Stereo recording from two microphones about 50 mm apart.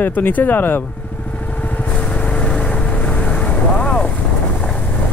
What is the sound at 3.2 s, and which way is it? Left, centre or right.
Vehicle, centre.